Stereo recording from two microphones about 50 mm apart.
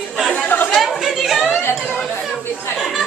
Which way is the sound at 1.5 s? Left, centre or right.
Left.